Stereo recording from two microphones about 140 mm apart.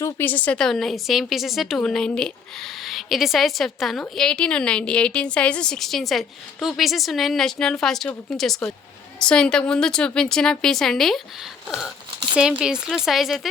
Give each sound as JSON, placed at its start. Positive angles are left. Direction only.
{"t": 0.0, "sound": "a woman's voice", "side_deg": 15}
{"t": 12.3, "sound": "a woman's voice", "side_deg": -5}